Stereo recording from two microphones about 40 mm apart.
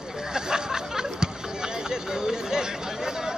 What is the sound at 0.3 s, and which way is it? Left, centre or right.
Hubbub, centre.